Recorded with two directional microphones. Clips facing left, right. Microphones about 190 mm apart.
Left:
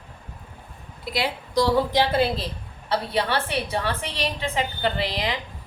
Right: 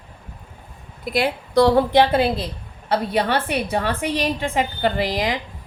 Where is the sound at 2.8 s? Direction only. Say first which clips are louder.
Right 4 dB; 50° right (ahead or behind).